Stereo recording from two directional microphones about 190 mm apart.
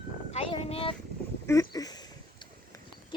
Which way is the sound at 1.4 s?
15° left (ahead or behind).